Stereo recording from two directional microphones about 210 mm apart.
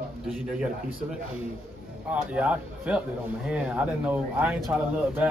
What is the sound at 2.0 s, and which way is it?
A man's voice, 5° right (ahead or behind).